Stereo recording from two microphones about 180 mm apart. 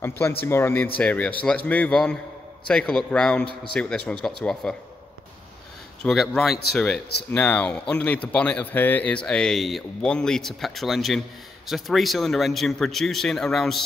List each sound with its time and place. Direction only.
0.4 s speech: 15° left (ahead or behind)
6.0 s speech: centre (ahead or behind)